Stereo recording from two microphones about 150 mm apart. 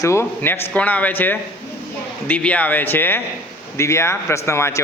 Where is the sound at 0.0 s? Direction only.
20° left (ahead or behind).